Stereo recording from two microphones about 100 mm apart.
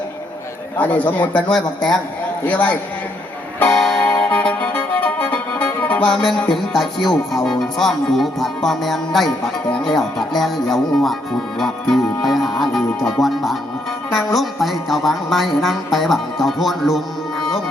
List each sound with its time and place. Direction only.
0.8 s a man's voice: 15° left (ahead or behind)
2.5 s a man's voice: 20° left (ahead or behind)
3.7 s music: 5° left (ahead or behind)